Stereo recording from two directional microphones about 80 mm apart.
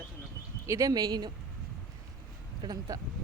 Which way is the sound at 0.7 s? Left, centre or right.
Right.